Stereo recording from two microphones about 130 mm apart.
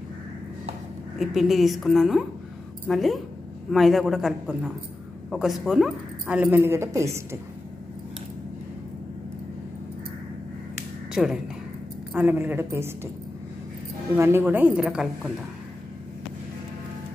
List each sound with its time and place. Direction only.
1.1 s a woman's voice: centre (ahead or behind)
6.2 s a woman's voice: 10° right (ahead or behind)
11.2 s a woman's voice: 5° right (ahead or behind)
12.1 s a woman's voice: 15° right (ahead or behind)
14.1 s a woman's voice: 20° right (ahead or behind)